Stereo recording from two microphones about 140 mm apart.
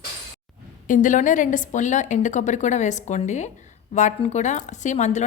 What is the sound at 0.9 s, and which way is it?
A woman's voice, 65° left (ahead or behind).